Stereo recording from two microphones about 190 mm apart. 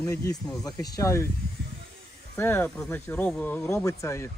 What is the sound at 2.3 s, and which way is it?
Speech, 15° left (ahead or behind).